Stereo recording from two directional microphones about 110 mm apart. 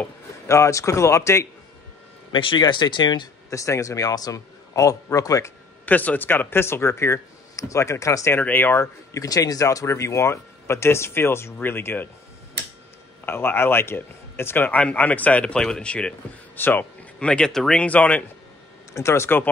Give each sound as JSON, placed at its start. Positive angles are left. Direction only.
{"t": 0.5, "sound": "speech", "side_deg": 30}
{"t": 2.3, "sound": "speech", "side_deg": 45}
{"t": 3.4, "sound": "a man's voice", "side_deg": 30}
{"t": 5.9, "sound": "speech", "side_deg": 15}
{"t": 9.1, "sound": "speech", "side_deg": 30}
{"t": 13.2, "sound": "a man's voice", "side_deg": 20}
{"t": 18.9, "sound": "speech", "side_deg": 25}